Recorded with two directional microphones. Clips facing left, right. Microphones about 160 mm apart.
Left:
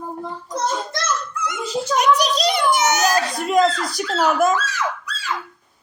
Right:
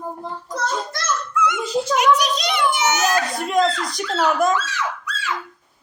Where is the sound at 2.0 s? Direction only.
35° left (ahead or behind).